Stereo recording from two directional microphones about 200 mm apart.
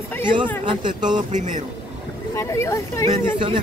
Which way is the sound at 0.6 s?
20° right (ahead or behind).